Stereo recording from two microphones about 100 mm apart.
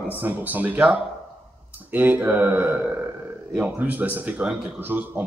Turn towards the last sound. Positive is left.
turn(degrees=-20)  # may be behind; listen again after turning